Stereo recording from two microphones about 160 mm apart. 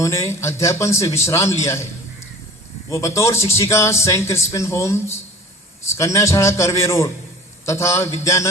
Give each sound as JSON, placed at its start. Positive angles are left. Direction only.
{"t": 0.0, "sound": "a man's voice", "side_deg": 20}
{"t": 2.9, "sound": "a man's voice", "side_deg": 20}